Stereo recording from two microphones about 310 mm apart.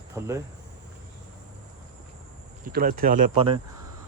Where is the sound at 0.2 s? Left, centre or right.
Centre.